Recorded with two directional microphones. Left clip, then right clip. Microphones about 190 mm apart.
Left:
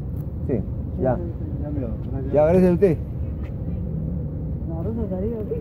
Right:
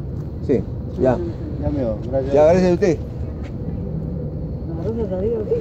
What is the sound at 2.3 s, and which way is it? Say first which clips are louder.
Speech: right 3 dB; 30° left (ahead or behind).